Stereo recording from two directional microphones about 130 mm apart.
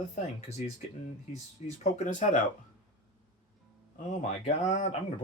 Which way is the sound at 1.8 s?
80° left.